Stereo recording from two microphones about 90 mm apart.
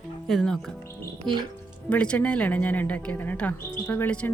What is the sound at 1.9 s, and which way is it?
A woman's voice, 15° left (ahead or behind).